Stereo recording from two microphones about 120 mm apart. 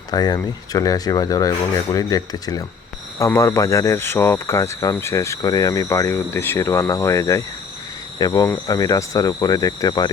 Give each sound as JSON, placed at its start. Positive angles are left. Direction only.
{"t": 0.1, "sound": "speech", "side_deg": 35}
{"t": 3.2, "sound": "cricket", "side_deg": 25}
{"t": 8.2, "sound": "speech", "side_deg": 30}